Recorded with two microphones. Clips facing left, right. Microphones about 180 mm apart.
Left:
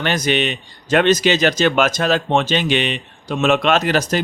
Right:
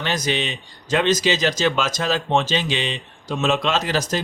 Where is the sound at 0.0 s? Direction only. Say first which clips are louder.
Left 5 dB; 65° left (ahead or behind).